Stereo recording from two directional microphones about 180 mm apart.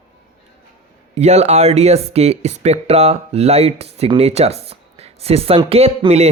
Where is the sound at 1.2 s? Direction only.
35° right (ahead or behind).